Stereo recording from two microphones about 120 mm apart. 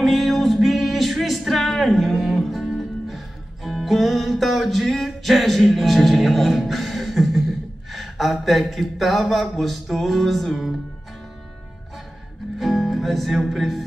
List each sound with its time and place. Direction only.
0.0 s a sound: centre (ahead or behind)
7.9 s speech: centre (ahead or behind)
12.5 s music: centre (ahead or behind)